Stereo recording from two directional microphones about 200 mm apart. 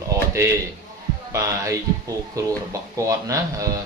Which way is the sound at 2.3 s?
15° right (ahead or behind).